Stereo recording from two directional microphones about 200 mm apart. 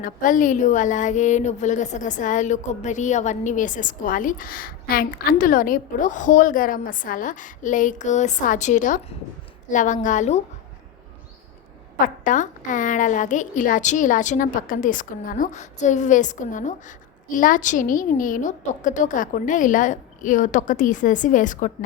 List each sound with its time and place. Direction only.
0.0 s a woman's voice: 40° left (ahead or behind)
11.9 s a woman's voice: 40° left (ahead or behind)